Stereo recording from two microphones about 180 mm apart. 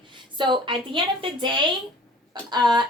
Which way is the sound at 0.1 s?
25° right (ahead or behind).